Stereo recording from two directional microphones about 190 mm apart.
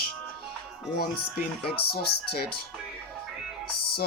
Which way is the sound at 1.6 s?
55° left (ahead or behind).